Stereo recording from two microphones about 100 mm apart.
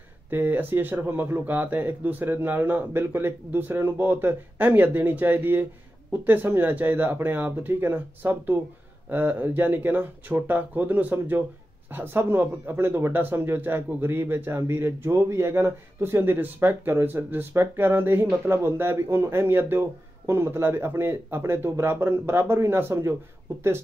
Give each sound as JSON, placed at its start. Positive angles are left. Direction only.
{"t": 0.3, "sound": "speech", "side_deg": -20}